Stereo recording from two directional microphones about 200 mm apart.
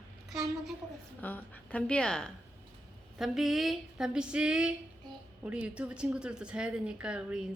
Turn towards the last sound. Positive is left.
turn(degrees=-5)  # may be behind; listen again after turning